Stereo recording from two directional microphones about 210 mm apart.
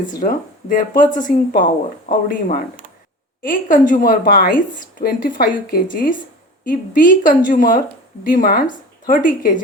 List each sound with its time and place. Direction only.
0.2 s a woman's voice: 40° left (ahead or behind)